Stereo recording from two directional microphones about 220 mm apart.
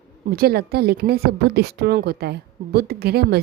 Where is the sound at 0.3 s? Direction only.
45° right (ahead or behind).